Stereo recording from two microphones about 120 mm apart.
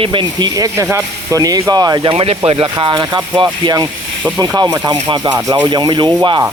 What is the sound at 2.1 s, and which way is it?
Speech, 50° right (ahead or behind).